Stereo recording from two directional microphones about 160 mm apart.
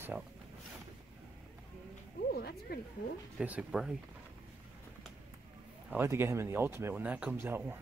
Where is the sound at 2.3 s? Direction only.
80° left.